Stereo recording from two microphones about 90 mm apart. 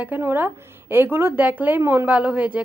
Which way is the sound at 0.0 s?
25° right (ahead or behind).